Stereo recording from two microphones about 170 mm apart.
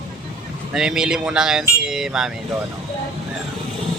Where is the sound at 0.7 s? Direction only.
5° right (ahead or behind).